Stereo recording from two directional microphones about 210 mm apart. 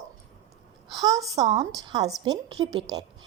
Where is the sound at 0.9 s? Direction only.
15° right (ahead or behind).